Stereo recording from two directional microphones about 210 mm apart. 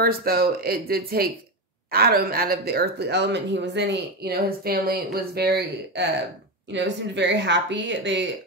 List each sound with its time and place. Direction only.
0.0 s speech: 45° right (ahead or behind)